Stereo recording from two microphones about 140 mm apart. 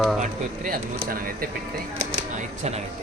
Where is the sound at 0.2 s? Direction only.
90° right.